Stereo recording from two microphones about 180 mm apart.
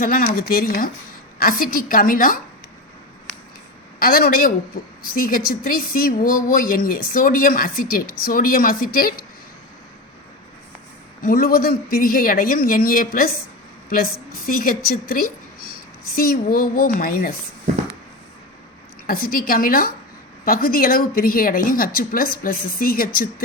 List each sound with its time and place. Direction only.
0.0 s a woman's voice: 50° left (ahead or behind)
4.0 s a woman's voice: 55° left (ahead or behind)
11.2 s a woman's voice: 55° left (ahead or behind)
19.0 s a woman's voice: 55° left (ahead or behind)